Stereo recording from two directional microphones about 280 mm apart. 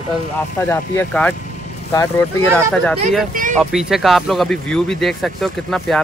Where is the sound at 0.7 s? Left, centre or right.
Centre.